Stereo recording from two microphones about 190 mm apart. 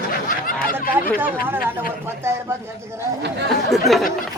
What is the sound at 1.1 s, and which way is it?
Speech, 10° right (ahead or behind).